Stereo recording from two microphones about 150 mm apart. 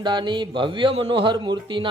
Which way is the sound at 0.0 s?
30° right (ahead or behind).